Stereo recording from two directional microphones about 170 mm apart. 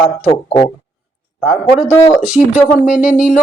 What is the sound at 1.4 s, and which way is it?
Speech, 10° right (ahead or behind).